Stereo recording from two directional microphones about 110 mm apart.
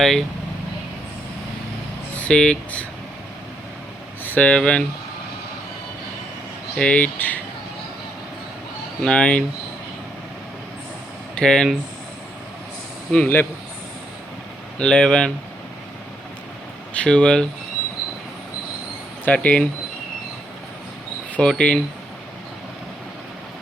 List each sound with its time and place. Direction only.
0.0 s speech: 5° left (ahead or behind)
2.1 s speech: 10° left (ahead or behind)
4.2 s speech: 15° left (ahead or behind)
6.7 s speech: 10° left (ahead or behind)
9.0 s speech: 10° left (ahead or behind)
11.3 s speech: 5° left (ahead or behind)
13.1 s speech: 15° left (ahead or behind)
14.8 s speech: 10° left (ahead or behind)
16.9 s speech: 10° left (ahead or behind)
19.2 s speech: 10° left (ahead or behind)
21.3 s speech: 10° left (ahead or behind)